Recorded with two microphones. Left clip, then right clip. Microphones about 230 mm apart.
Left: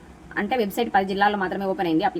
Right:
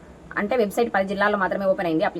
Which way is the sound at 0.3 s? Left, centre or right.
Centre.